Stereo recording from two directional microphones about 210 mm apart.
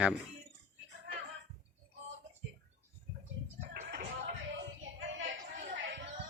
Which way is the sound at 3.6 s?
45° right (ahead or behind).